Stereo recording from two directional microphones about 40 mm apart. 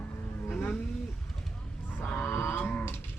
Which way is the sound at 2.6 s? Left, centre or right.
Left.